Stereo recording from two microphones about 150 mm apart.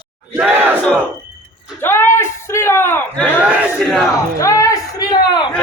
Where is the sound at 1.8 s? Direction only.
15° left (ahead or behind).